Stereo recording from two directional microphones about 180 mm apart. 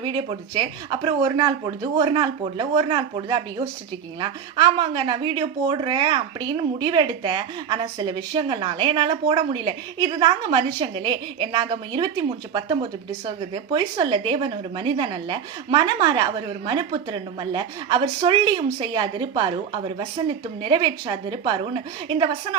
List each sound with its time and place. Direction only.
0.0 s a woman's voice: 30° right (ahead or behind)